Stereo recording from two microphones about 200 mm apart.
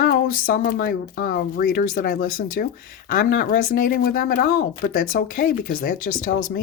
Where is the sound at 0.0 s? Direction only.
45° left (ahead or behind).